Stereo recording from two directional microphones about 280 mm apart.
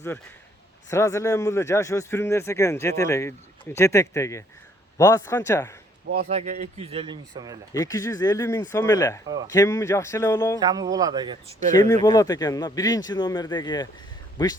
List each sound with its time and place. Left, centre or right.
0.9 s speech: centre
6.1 s speech: right; by 7.6 s centre
7.7 s speech: centre
10.6 s speech: centre
11.7 s speech: centre